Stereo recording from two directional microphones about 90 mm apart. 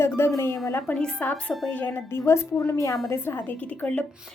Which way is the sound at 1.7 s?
25° left (ahead or behind).